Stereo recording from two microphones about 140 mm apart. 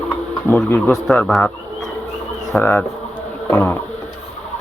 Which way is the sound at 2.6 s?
10° left (ahead or behind).